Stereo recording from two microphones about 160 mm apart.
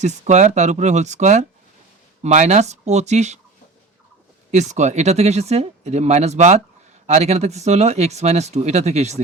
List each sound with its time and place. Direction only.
0.0 s speech: 45° right (ahead or behind)
4.5 s speech: 45° right (ahead or behind)